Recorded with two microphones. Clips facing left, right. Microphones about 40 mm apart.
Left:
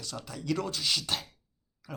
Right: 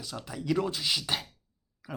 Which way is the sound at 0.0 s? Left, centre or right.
Centre.